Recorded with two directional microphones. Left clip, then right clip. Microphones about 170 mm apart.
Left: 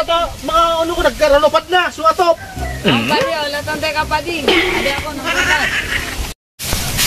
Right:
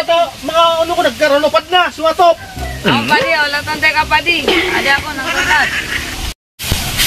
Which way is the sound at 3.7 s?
15° left (ahead or behind).